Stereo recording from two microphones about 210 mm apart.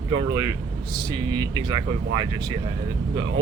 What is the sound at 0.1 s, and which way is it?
Speech, 15° right (ahead or behind).